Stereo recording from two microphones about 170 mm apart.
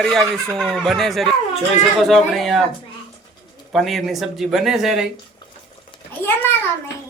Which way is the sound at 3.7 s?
Centre (ahead or behind).